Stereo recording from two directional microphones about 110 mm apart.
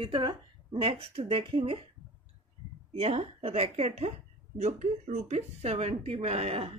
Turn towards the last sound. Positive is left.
turn(degrees=-65)  # may be behind; listen again after turning